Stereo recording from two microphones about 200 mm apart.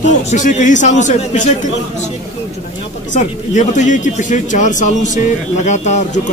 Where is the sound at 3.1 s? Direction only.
35° left (ahead or behind).